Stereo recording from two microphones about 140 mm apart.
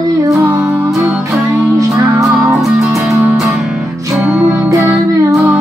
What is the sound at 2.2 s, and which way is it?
Music, centre (ahead or behind).